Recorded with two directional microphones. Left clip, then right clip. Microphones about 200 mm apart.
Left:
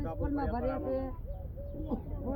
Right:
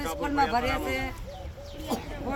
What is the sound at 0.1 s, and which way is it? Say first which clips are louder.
A man's voice: right 11 dB; 45° right (ahead or behind).